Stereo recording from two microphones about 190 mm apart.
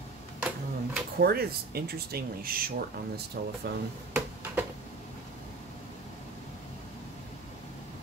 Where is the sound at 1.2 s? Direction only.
55° right (ahead or behind).